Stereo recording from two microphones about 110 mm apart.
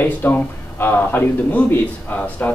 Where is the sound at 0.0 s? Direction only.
20° left (ahead or behind).